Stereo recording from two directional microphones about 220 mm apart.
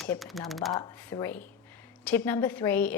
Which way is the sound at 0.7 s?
15° left (ahead or behind).